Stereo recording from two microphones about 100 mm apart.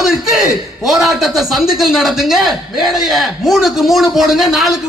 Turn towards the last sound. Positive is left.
turn(degrees=-5)  # may be behind; listen again after turning